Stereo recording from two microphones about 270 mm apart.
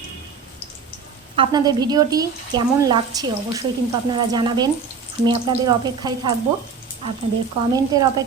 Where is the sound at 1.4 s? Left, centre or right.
Centre.